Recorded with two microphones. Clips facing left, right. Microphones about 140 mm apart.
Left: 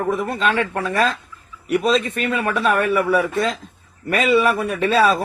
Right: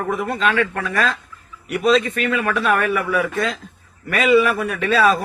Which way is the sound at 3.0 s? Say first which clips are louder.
Left 2 dB; 30° left (ahead or behind).